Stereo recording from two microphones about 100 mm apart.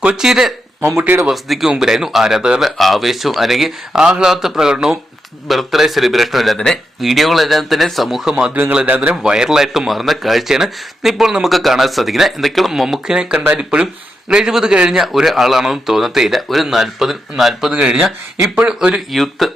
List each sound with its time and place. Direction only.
0.0 s speech: 10° right (ahead or behind)
0.9 s speech: 25° right (ahead or behind)
1.3 s speech: centre (ahead or behind)